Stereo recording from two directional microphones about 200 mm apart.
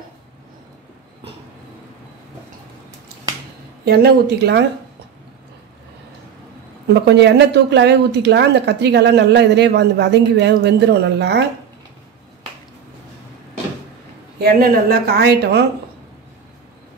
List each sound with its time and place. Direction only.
3.8 s speech: 50° right (ahead or behind)
6.9 s speech: 60° right (ahead or behind)
14.4 s speech: 50° right (ahead or behind)